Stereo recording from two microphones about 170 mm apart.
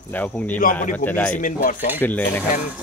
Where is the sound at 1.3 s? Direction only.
50° left (ahead or behind).